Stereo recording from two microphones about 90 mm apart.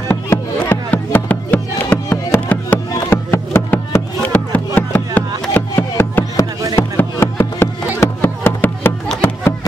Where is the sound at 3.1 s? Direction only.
30° left (ahead or behind).